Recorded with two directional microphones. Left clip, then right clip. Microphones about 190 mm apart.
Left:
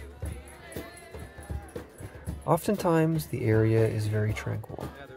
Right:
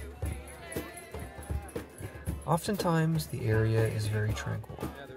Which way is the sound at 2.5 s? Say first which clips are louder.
Left 4 dB; 35° left (ahead or behind).